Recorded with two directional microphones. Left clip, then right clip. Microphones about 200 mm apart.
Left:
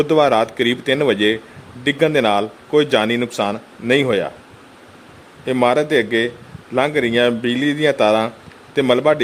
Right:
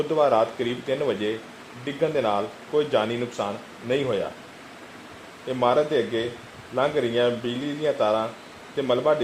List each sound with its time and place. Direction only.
0.1 s a man's voice: 55° left (ahead or behind)
5.5 s a man's voice: 55° left (ahead or behind)